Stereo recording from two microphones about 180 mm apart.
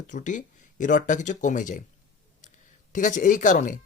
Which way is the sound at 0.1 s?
45° left (ahead or behind).